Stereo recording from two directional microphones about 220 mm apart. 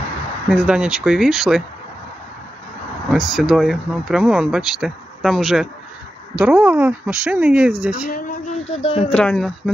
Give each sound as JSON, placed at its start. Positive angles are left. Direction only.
{"t": 0.5, "sound": "speech", "side_deg": -5}
{"t": 3.1, "sound": "speech", "side_deg": 0}
{"t": 8.1, "sound": "a sound", "side_deg": 35}
{"t": 9.1, "sound": "speech", "side_deg": 5}